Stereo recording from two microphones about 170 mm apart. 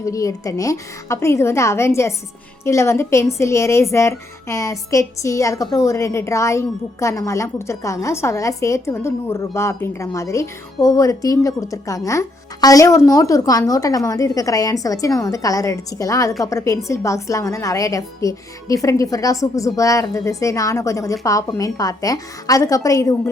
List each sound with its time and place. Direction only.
0.0 s a woman's voice: 20° left (ahead or behind)